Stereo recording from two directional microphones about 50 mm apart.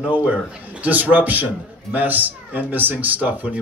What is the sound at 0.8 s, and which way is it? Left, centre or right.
A man's voice, right.